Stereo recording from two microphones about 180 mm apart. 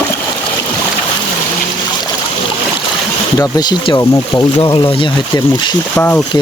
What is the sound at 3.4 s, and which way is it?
Speech, 20° left (ahead or behind).